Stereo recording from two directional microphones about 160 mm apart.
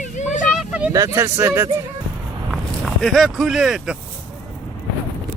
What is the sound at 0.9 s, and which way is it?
Speech, 20° right (ahead or behind).